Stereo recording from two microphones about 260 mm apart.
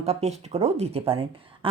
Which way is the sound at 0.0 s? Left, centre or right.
Right.